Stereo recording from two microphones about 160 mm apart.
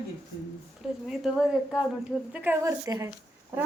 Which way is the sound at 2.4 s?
15° right (ahead or behind).